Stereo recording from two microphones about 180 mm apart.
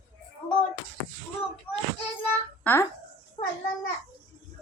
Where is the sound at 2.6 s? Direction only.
10° left (ahead or behind).